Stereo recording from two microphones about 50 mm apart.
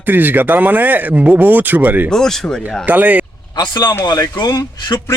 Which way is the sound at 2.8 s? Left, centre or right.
Right.